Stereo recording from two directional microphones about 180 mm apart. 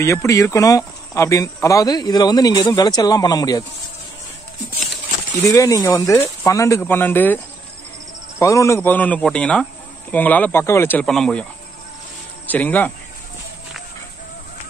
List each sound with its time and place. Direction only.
0.0 s speech: 15° left (ahead or behind)
5.4 s speech: 20° left (ahead or behind)
8.4 s speech: 15° left (ahead or behind)
12.4 s speech: 10° left (ahead or behind)